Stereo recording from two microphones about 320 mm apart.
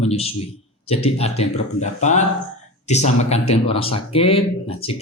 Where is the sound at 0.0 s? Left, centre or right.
Centre.